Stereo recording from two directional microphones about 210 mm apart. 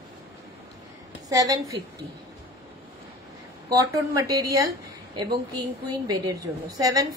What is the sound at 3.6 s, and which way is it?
Speech, 15° right (ahead or behind).